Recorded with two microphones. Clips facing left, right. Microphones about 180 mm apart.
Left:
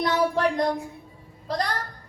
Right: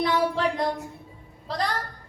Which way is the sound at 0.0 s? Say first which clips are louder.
Left 1 dB; 45° left (ahead or behind).